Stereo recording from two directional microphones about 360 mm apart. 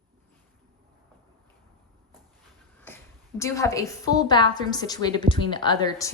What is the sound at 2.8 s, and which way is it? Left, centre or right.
A woman's voice, centre.